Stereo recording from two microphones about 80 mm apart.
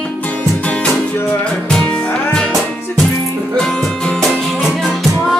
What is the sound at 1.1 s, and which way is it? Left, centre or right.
Music, left.